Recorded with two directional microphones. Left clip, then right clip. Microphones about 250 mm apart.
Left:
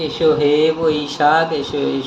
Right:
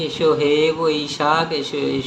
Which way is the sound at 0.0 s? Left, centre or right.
Centre.